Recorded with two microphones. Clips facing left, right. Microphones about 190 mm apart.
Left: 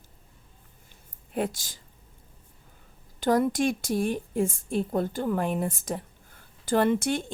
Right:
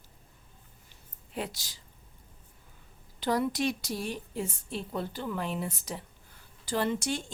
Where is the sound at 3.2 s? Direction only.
45° left (ahead or behind).